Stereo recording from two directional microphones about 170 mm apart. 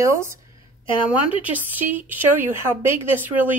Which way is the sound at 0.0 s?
15° right (ahead or behind).